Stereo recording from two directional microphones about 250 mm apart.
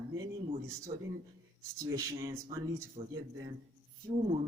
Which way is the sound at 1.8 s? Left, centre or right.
Centre.